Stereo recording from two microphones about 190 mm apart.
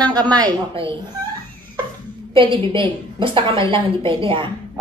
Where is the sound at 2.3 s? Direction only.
25° right (ahead or behind).